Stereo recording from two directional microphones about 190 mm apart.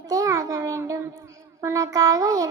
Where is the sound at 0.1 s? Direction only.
15° right (ahead or behind).